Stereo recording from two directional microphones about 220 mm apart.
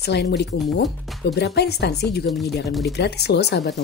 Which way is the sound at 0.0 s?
50° left (ahead or behind).